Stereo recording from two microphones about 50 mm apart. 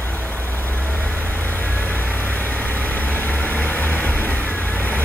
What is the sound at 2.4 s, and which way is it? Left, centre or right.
Vehicle, left.